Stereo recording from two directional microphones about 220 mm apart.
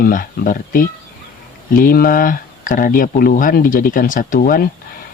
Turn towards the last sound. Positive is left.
turn(degrees=40)  # may be behind; listen again after turning